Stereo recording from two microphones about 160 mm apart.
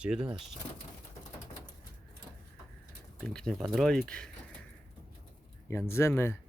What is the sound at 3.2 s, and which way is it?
Speech, 5° left (ahead or behind).